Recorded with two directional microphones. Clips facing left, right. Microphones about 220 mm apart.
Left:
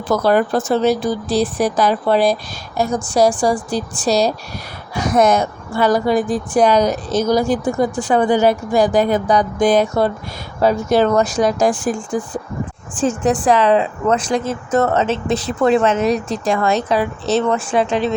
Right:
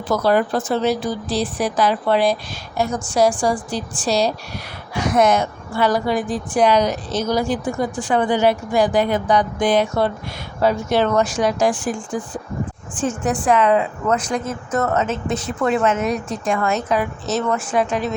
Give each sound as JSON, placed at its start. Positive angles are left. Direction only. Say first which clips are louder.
{"t": 0.1, "sound": "a woman's voice", "louder": "left 2 dB", "side_deg": 50}
{"t": 13.0, "sound": "speech", "louder": "left 5 dB", "side_deg": 35}
{"t": 16.0, "sound": "a woman's voice", "louder": "left 5 dB", "side_deg": 90}
{"t": 16.5, "sound": "a woman's voice", "louder": "left 3 dB", "side_deg": 35}